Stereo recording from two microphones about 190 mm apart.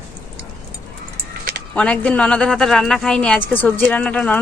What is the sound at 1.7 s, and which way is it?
A woman's voice, 5° left (ahead or behind).